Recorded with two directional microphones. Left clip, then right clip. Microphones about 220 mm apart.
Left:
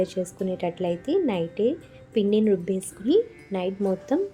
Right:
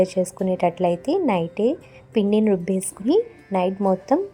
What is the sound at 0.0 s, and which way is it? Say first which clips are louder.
A woman's voice: right 6 dB; 20° right (ahead or behind).